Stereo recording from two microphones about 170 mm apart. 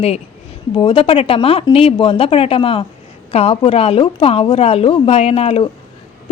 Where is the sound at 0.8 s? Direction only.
30° left (ahead or behind).